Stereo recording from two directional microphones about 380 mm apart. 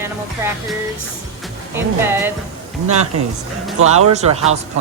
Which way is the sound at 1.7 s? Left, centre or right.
Centre.